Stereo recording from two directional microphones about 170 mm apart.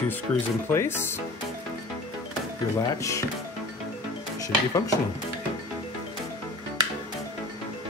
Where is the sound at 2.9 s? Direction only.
20° left (ahead or behind).